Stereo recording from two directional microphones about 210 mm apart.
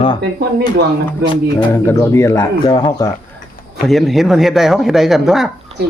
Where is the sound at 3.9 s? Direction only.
Centre (ahead or behind).